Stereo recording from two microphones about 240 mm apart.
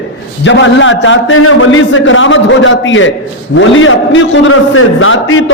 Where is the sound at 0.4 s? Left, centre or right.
Left.